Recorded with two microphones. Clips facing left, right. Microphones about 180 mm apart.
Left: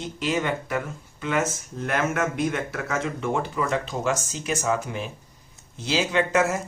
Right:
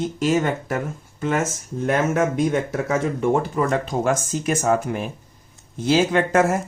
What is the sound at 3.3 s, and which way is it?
Speech, 45° right (ahead or behind).